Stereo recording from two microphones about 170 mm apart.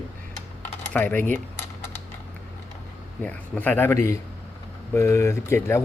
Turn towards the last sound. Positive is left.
turn(degrees=15)  # may be behind; listen again after turning